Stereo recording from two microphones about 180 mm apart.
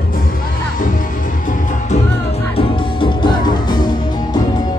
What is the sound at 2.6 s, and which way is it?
Music, 30° left (ahead or behind).